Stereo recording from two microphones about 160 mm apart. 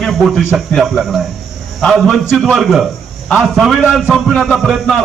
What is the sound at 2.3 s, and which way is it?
A man's voice, centre (ahead or behind).